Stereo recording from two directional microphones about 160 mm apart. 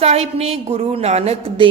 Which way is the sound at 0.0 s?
40° right (ahead or behind).